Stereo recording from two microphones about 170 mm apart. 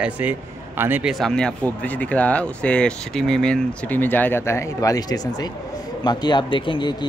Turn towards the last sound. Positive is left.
turn(degrees=30)  # may be behind; listen again after turning